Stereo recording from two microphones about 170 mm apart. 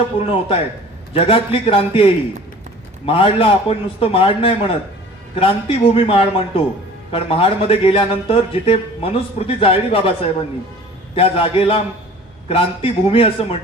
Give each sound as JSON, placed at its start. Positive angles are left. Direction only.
{"t": 0.2, "sound": "a man's voice", "side_deg": 35}
{"t": 11.1, "sound": "a man's voice", "side_deg": 35}